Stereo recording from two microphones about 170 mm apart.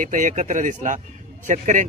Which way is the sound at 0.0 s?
50° right (ahead or behind).